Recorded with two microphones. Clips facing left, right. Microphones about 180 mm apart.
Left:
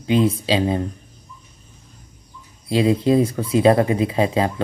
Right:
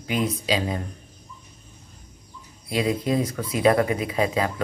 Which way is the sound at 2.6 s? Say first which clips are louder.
Left 7 dB; 30° left (ahead or behind).